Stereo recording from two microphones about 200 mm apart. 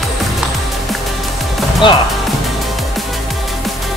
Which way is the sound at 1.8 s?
25° left (ahead or behind).